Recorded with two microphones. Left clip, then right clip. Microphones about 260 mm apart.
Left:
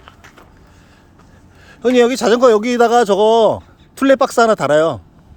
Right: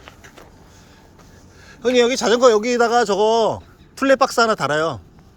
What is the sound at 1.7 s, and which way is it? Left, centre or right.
A man's voice, left.